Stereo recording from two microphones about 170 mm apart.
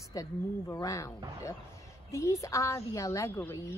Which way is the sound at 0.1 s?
20° left (ahead or behind).